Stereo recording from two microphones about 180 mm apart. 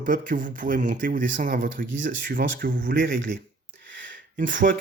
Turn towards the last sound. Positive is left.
turn(degrees=-65)  # may be behind; listen again after turning